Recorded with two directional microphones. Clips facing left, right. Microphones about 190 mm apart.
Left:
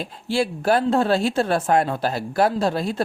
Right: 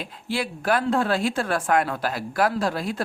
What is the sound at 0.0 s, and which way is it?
Speech, 30° left (ahead or behind).